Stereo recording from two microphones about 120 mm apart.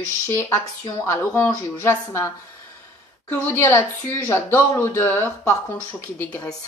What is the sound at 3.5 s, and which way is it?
A woman's voice, 20° left (ahead or behind).